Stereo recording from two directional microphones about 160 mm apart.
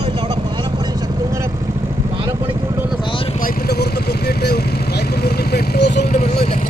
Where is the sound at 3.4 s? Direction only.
90° left.